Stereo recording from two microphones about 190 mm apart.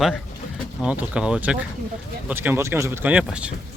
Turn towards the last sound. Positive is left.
turn(degrees=-5)  # may be behind; listen again after turning